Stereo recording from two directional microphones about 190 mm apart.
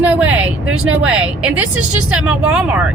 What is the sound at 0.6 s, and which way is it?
Speech, 90° right.